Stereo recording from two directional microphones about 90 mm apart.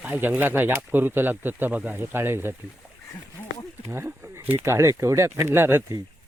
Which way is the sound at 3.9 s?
25° right (ahead or behind).